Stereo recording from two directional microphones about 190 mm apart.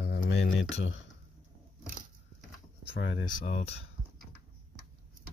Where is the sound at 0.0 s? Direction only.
65° left (ahead or behind).